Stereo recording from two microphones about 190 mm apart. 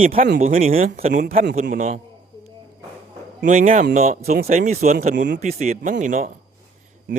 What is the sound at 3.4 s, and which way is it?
Speech, 45° right (ahead or behind).